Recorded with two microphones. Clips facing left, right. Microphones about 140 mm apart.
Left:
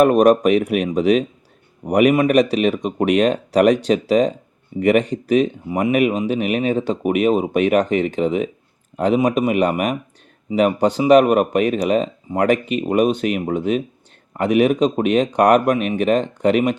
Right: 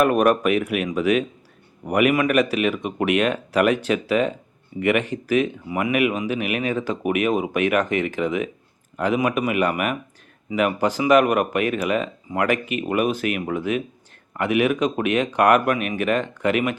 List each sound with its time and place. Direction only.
0.0 s speech: 35° left (ahead or behind)